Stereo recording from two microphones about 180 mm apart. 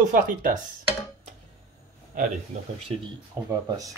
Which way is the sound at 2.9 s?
25° right (ahead or behind).